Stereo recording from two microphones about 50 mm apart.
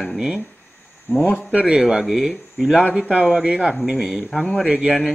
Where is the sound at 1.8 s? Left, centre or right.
Centre.